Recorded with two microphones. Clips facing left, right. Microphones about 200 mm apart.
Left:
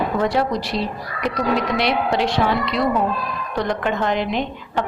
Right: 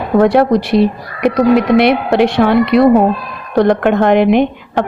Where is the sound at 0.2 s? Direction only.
60° right (ahead or behind).